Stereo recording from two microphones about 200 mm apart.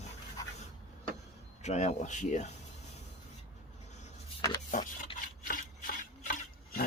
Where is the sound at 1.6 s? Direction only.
35° left (ahead or behind).